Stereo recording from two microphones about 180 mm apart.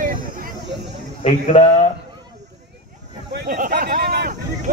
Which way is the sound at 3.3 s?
60° right (ahead or behind).